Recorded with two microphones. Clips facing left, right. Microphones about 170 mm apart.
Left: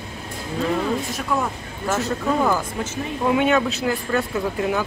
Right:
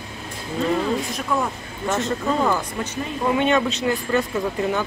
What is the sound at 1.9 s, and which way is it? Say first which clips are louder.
Speech: even; 5° left (ahead or behind).